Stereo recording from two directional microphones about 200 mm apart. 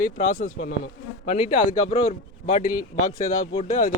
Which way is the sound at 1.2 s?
30° left (ahead or behind).